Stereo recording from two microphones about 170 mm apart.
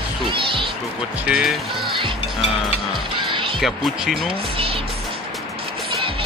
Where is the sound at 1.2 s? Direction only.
5° right (ahead or behind).